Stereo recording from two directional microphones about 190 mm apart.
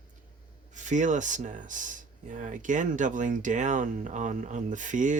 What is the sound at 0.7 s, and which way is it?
Speech, 40° right (ahead or behind).